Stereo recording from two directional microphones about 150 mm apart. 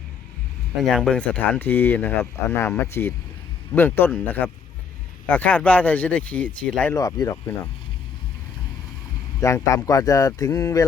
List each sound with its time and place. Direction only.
0.8 s speech: 5° left (ahead or behind)
6.9 s speech: 25° left (ahead or behind)
9.4 s speech: 20° left (ahead or behind)